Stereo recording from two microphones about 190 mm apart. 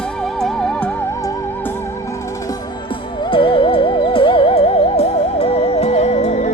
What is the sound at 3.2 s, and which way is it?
Music, 25° left (ahead or behind).